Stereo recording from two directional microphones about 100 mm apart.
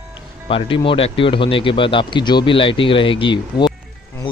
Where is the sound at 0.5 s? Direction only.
65° left (ahead or behind).